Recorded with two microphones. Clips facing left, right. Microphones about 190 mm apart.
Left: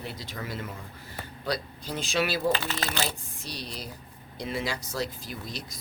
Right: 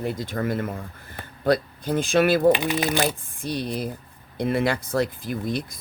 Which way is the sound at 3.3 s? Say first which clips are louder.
Right 11 dB; 55° right (ahead or behind).